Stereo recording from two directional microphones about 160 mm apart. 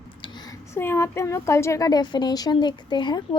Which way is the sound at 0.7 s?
15° left (ahead or behind).